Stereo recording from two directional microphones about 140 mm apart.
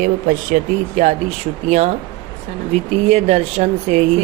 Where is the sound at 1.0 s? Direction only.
50° right (ahead or behind).